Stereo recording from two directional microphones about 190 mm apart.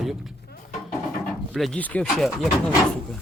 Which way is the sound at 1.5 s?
Centre (ahead or behind).